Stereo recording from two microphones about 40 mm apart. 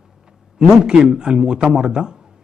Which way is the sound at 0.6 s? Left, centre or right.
Right.